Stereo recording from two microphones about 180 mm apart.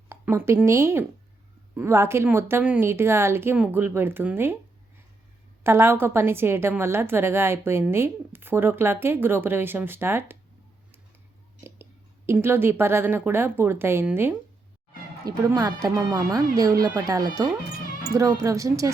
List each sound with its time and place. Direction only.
0.1 s a woman's voice: 15° right (ahead or behind)
5.6 s a woman's voice: 15° right (ahead or behind)
11.6 s a woman's voice: 15° right (ahead or behind)